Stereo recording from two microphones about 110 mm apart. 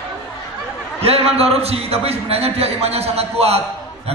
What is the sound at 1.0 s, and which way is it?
A man's voice, 65° right (ahead or behind).